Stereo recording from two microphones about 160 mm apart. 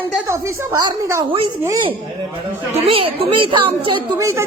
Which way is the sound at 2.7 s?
35° right (ahead or behind).